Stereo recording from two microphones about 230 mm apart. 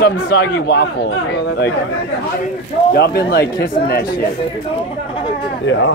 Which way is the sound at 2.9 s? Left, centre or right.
Left.